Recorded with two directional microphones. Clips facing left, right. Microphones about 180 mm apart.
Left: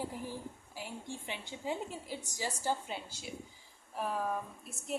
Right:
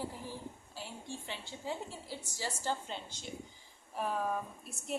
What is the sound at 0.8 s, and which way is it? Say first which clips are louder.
A woman's voice: left 2 dB; 15° left (ahead or behind).